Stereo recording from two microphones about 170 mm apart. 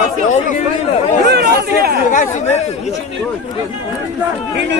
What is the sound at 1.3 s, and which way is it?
Speech, 70° right (ahead or behind).